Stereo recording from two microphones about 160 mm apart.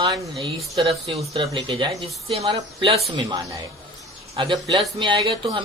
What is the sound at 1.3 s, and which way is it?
Speech, 35° right (ahead or behind).